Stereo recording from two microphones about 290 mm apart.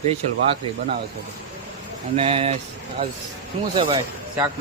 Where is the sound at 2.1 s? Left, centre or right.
Centre.